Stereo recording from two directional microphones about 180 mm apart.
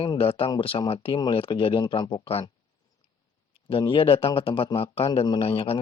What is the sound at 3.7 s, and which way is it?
A man's voice, 30° left (ahead or behind).